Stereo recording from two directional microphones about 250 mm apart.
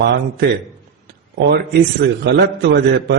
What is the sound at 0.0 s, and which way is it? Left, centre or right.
A man's voice, right.